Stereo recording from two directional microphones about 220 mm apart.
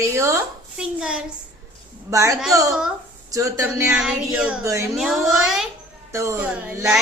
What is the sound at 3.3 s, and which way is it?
Child singing, 15° right (ahead or behind).